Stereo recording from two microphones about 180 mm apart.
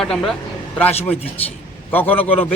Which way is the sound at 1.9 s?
10° left (ahead or behind).